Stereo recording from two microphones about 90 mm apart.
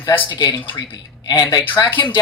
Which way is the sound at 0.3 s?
55° left (ahead or behind).